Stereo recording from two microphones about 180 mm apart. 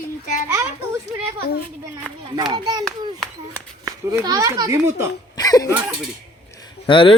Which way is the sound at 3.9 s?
20° right (ahead or behind).